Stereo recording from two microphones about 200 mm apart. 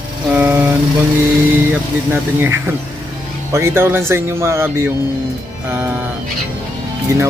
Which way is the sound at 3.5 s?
15° right (ahead or behind).